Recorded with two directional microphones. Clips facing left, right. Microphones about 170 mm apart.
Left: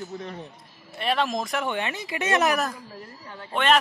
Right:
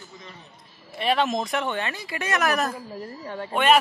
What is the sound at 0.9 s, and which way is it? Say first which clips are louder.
Speech: right 2 dB; centre (ahead or behind).